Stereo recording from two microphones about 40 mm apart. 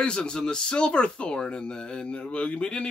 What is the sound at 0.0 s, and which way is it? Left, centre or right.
Speech, left.